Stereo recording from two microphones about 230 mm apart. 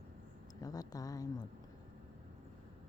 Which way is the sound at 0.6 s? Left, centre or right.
Centre.